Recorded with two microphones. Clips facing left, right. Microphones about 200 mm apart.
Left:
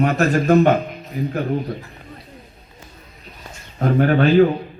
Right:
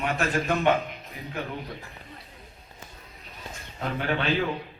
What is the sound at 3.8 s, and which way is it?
Speech, 45° left (ahead or behind).